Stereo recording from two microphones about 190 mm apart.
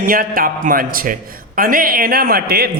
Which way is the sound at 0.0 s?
50° right (ahead or behind).